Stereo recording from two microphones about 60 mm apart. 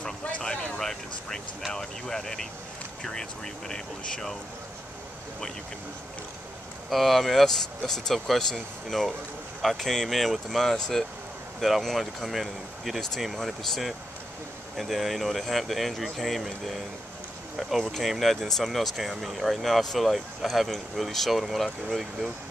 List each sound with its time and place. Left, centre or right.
0.0 s vehicle: centre
1.7 s speech: centre
6.9 s speech: centre